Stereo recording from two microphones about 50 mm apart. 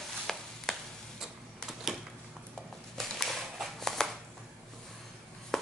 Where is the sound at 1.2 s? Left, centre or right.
Centre.